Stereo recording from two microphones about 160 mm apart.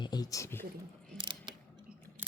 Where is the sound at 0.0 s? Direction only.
25° left (ahead or behind).